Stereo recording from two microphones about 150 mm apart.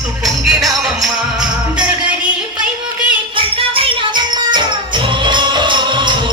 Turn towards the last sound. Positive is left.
turn(degrees=-30)  # may be behind; listen again after turning